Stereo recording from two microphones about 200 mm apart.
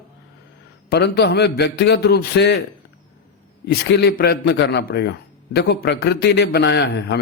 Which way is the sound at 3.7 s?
55° left (ahead or behind).